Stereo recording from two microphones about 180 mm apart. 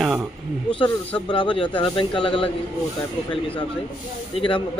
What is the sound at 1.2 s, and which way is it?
Speech, 25° left (ahead or behind).